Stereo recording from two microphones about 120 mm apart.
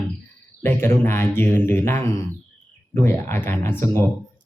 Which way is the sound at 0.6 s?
20° left (ahead or behind).